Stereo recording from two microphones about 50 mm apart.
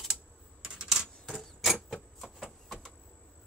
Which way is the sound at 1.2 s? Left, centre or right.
Centre.